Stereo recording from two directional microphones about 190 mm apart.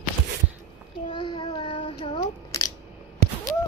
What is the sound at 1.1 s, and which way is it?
Child singing, 25° left (ahead or behind).